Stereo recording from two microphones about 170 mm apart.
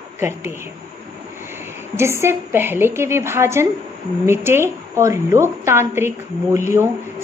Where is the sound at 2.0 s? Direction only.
15° right (ahead or behind).